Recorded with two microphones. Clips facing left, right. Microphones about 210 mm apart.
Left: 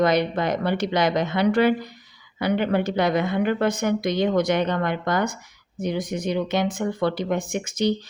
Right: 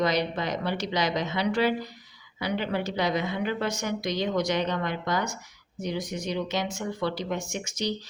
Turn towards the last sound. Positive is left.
turn(degrees=55)  # may be behind; listen again after turning